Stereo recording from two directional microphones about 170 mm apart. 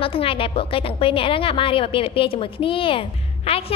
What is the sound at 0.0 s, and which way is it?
A woman's voice, 30° left (ahead or behind).